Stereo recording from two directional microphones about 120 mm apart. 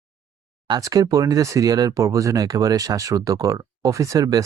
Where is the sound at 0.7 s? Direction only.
30° right (ahead or behind).